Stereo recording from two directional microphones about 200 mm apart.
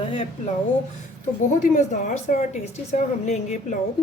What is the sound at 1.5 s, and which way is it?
A woman's voice, 40° left (ahead or behind).